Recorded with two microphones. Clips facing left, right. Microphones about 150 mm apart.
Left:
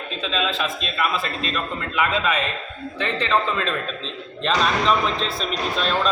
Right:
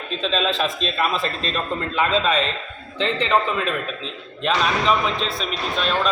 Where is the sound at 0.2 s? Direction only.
40° right (ahead or behind); by 3.3 s 20° right (ahead or behind).